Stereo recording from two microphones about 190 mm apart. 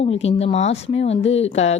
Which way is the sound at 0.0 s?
35° left (ahead or behind).